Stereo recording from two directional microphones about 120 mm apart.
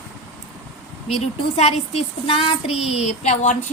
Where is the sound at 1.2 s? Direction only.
65° left (ahead or behind).